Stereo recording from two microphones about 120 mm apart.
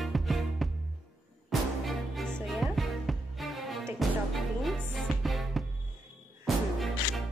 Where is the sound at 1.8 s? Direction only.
Centre (ahead or behind).